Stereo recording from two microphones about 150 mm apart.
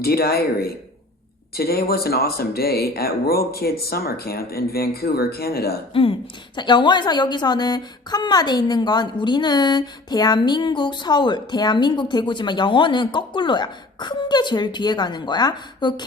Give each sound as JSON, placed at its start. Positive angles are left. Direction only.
{"t": 0.0, "sound": "speech", "side_deg": 90}
{"t": 5.9, "sound": "a woman's voice", "side_deg": 35}